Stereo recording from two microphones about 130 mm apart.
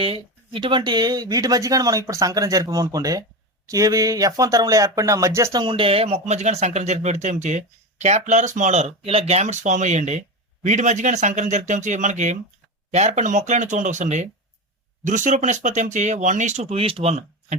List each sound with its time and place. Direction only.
0.0 s speech: 45° right (ahead or behind); by 5.6 s 25° right (ahead or behind)
5.6 s speech: 45° right (ahead or behind)